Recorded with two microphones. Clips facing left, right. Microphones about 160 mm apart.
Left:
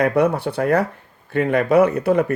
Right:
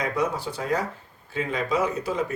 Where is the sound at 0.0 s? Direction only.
60° left (ahead or behind).